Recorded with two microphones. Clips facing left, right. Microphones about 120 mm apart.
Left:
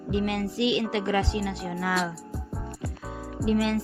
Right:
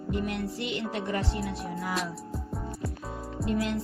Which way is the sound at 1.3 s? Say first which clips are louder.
Left 3 dB; 70° left (ahead or behind).